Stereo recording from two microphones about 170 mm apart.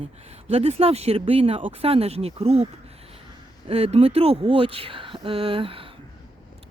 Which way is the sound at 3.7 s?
35° right (ahead or behind).